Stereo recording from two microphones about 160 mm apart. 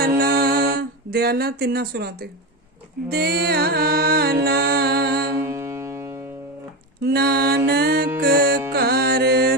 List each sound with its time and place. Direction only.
0.2 s music: 75° right (ahead or behind)
5.4 s music: 15° right (ahead or behind)
7.0 s mantra: 80° right
8.2 s music: 70° right (ahead or behind)